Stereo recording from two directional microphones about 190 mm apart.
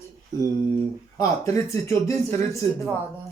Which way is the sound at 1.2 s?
15° left (ahead or behind).